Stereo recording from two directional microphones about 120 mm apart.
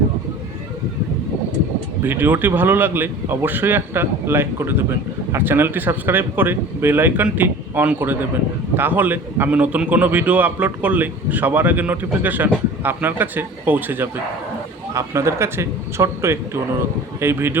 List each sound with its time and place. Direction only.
2.0 s a man's voice: 15° right (ahead or behind)